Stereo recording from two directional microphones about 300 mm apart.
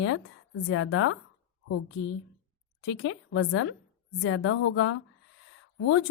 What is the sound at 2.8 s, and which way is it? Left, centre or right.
A woman's voice, left.